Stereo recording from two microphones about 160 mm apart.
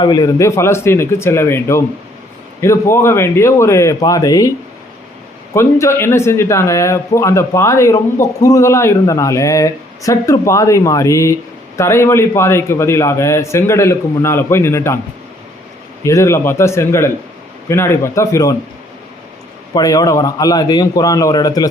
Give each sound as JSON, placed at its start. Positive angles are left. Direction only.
{"t": 0.0, "sound": "a man's voice", "side_deg": 25}
{"t": 5.5, "sound": "a man's voice", "side_deg": 15}
{"t": 16.0, "sound": "a man's voice", "side_deg": 20}
{"t": 19.7, "sound": "speech", "side_deg": 25}